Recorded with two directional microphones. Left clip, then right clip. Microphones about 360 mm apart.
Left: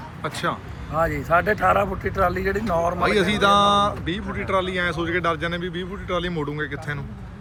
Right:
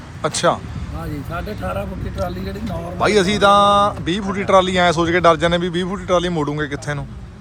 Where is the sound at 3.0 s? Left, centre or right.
Centre.